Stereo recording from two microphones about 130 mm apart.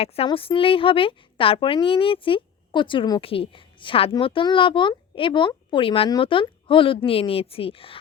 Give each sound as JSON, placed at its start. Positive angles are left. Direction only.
{"t": 0.0, "sound": "speech", "side_deg": 50}